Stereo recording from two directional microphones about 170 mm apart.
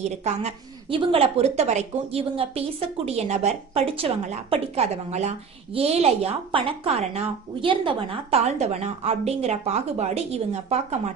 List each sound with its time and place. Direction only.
0.0 s a woman's voice: 40° right (ahead or behind)